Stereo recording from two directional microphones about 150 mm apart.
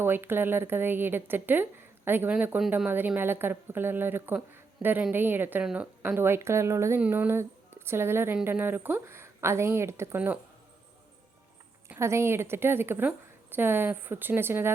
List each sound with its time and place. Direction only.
0.0 s speech: 15° right (ahead or behind)
11.9 s speech: 20° right (ahead or behind)